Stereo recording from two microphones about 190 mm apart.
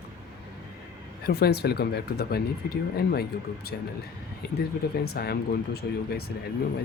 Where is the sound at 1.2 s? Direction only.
55° left (ahead or behind).